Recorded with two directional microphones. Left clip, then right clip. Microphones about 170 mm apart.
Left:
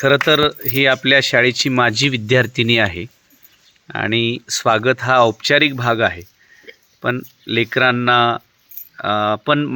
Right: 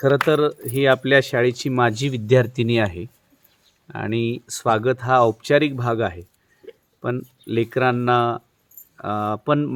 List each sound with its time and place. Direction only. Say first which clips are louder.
0.3 s speech: left 4 dB; 10° left (ahead or behind)
6.7 s a sound: left 1 dB; 85° right
7.0 s speech: left 6 dB; 10° left (ahead or behind)